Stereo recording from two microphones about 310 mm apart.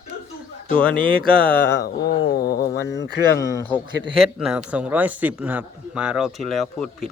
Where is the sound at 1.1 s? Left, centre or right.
Centre.